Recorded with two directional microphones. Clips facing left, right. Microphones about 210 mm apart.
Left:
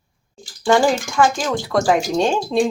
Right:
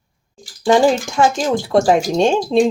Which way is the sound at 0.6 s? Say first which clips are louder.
Right 3 dB; 20° right (ahead or behind).